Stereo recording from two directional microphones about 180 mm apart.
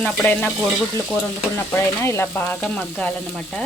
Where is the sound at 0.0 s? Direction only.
10° left (ahead or behind).